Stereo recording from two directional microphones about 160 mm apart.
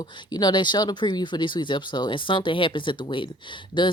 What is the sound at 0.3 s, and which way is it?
Speech, 25° left (ahead or behind).